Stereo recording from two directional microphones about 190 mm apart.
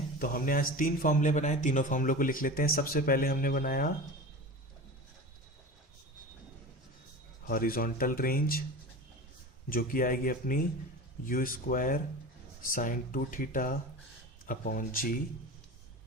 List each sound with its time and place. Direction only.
0.2 s speech: 50° left (ahead or behind)
7.4 s speech: 50° left (ahead or behind)
9.6 s speech: 45° left (ahead or behind)